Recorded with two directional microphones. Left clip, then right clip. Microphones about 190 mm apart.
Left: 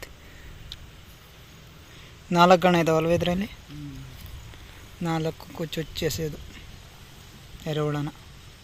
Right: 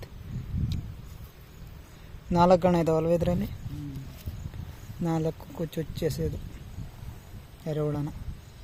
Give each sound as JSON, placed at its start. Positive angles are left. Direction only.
{"t": 2.3, "sound": "speech", "side_deg": -5}
{"t": 5.0, "sound": "speech", "side_deg": -15}
{"t": 7.6, "sound": "speech", "side_deg": 0}